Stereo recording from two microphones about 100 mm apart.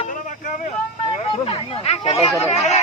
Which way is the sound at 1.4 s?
70° left (ahead or behind).